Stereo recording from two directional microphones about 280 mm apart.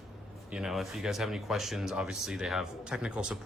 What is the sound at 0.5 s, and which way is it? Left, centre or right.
Speech, centre.